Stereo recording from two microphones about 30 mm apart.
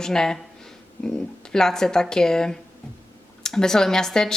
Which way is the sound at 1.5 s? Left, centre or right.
Centre.